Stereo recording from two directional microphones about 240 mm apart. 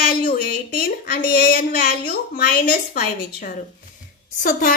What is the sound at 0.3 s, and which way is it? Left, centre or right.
Speech, left.